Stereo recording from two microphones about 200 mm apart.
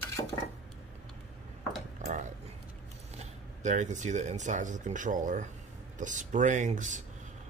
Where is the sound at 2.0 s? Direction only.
40° right (ahead or behind).